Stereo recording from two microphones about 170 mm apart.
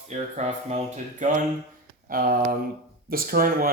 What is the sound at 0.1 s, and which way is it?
Speech, 45° right (ahead or behind).